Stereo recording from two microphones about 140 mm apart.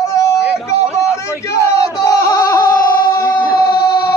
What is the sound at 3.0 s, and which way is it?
Music, 90° left.